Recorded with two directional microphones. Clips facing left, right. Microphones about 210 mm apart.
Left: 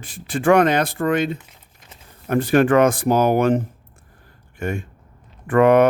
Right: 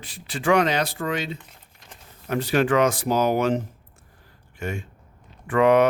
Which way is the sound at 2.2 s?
50° left (ahead or behind).